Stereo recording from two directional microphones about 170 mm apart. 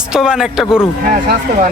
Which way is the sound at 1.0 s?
55° right (ahead or behind).